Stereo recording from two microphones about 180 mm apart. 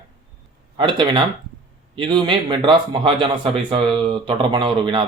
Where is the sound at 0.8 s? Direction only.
25° right (ahead or behind).